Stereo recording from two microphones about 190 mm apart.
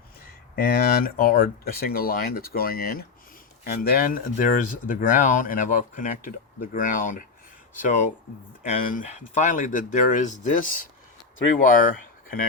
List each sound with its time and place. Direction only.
0.5 s speech: 50° left (ahead or behind)